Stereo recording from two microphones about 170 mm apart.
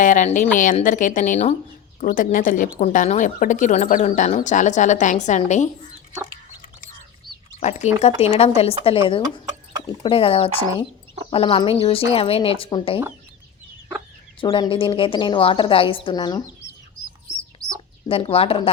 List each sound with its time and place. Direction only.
0.0 s a woman's voice: 50° left (ahead or behind)
7.6 s speech: 40° left (ahead or behind)
14.4 s a woman's voice: 30° left (ahead or behind)
18.1 s speech: 35° left (ahead or behind)